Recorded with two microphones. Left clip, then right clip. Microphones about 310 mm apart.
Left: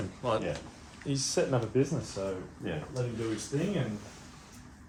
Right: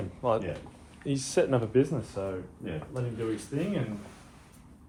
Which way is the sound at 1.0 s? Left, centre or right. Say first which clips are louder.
Right 3 dB; right.